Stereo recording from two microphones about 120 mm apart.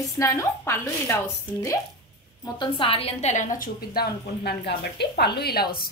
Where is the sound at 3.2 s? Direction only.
90° left.